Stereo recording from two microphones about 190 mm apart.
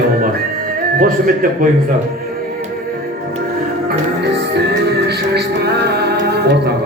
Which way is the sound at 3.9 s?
60° right (ahead or behind).